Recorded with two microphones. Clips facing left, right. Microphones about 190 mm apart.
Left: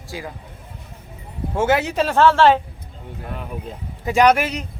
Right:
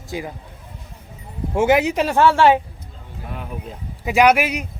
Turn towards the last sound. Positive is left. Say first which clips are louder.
# even
turn(degrees=-10)  # may be behind; listen again after turning